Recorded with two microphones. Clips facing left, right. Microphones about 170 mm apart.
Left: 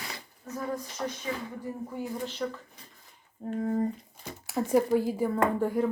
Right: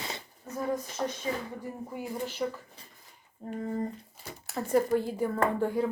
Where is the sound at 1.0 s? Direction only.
20° right (ahead or behind).